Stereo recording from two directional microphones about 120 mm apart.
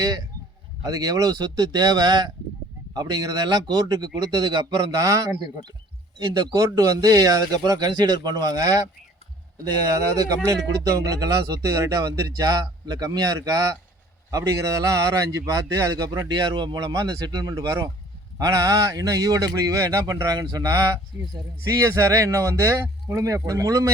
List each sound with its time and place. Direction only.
0.8 s speech: 30° right (ahead or behind)
10.2 s a man's voice: 30° right (ahead or behind)